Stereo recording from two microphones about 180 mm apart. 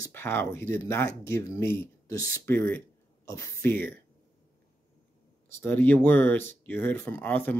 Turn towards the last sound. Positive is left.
turn(degrees=10)  # may be behind; listen again after turning